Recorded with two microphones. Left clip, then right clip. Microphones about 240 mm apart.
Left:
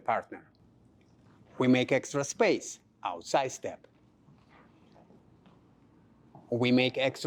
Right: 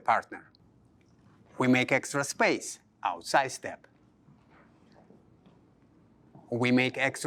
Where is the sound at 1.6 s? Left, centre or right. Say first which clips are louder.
Right 1 dB; right.